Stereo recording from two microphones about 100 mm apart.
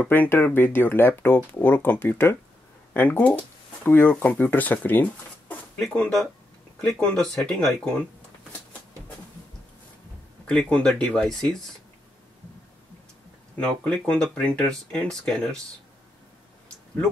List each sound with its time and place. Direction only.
0.1 s speech: 20° left (ahead or behind)
5.8 s speech: 5° left (ahead or behind)
10.7 s speech: 10° left (ahead or behind)
13.6 s speech: 10° left (ahead or behind)